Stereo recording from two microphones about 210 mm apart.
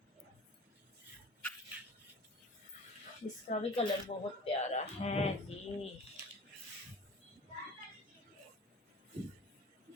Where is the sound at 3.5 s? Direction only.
35° left (ahead or behind).